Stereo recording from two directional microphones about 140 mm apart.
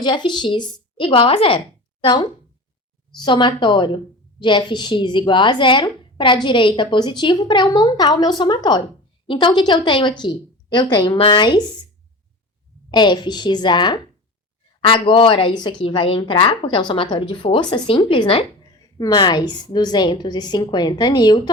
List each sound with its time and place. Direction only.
0.0 s a woman's voice: 35° left (ahead or behind)
12.9 s a woman's voice: 30° left (ahead or behind)